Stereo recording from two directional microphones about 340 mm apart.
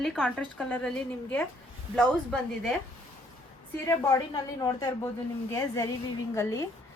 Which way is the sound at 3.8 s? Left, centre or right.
Centre.